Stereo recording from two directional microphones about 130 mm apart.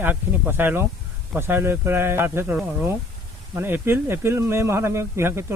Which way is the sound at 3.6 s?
15° right (ahead or behind).